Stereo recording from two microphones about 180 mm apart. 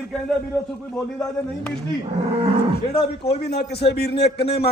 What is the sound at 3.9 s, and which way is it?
Speech, 65° left (ahead or behind).